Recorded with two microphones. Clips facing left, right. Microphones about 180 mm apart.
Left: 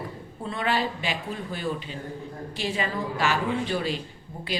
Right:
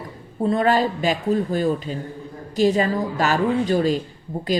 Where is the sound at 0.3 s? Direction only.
40° right (ahead or behind).